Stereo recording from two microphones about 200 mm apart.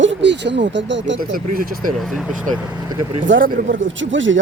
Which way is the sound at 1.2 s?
45° right (ahead or behind).